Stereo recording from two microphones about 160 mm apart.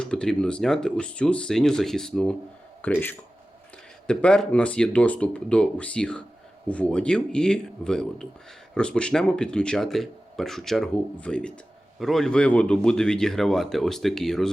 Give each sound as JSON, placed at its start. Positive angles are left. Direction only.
{"t": 0.0, "sound": "speech", "side_deg": 5}